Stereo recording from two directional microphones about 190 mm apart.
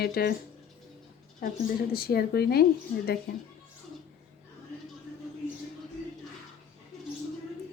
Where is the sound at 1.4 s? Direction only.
50° left (ahead or behind).